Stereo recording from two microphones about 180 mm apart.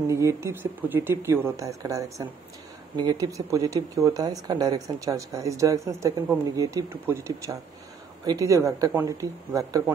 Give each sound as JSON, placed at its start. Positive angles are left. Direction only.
{"t": 0.1, "sound": "speech", "side_deg": -15}